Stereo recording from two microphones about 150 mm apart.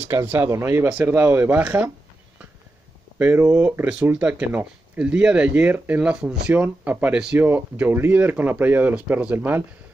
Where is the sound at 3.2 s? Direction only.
15° right (ahead or behind).